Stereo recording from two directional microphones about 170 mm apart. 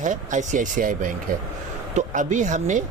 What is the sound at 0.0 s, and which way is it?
Speech, 45° right (ahead or behind).